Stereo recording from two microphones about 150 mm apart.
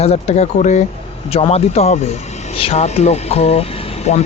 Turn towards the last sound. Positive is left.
turn(degrees=45)  # may be behind; listen again after turning